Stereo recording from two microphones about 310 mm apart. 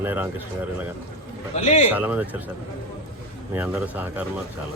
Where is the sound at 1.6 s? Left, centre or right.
Left.